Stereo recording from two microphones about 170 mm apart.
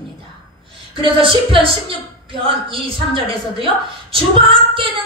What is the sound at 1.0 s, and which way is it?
A woman's voice, 30° right (ahead or behind).